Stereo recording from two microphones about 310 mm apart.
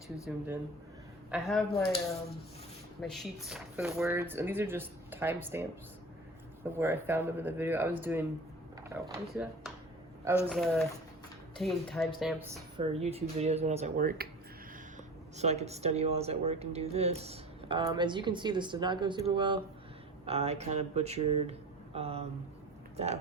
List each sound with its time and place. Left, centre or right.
0.3 s speech: centre
3.0 s speech: centre
6.7 s speech: centre
9.3 s speech: centre
12.7 s speech: centre